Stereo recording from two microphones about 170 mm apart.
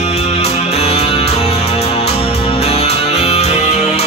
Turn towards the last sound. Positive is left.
turn(degrees=40)  # may be behind; listen again after turning